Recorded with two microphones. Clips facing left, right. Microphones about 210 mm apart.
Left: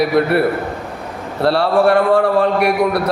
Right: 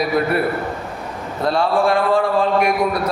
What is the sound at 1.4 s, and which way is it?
A man's voice, 70° left (ahead or behind).